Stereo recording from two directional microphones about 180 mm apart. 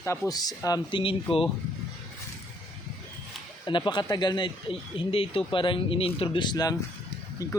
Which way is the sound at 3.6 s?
25° left (ahead or behind).